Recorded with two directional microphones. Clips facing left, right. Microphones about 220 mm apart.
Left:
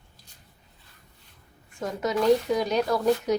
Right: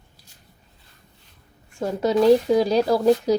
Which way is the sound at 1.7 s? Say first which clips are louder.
Right 6 dB; 30° right (ahead or behind).